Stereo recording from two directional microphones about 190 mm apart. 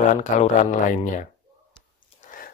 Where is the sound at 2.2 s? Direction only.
45° left (ahead or behind).